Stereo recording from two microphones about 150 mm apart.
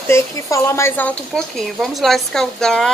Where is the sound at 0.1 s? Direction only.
20° left (ahead or behind).